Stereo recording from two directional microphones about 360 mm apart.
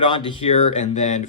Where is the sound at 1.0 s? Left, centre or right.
Centre.